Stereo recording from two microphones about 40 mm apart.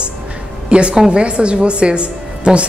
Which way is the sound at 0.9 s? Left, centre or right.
Centre.